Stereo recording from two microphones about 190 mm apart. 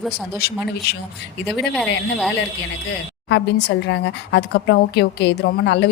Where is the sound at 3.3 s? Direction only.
65° left (ahead or behind).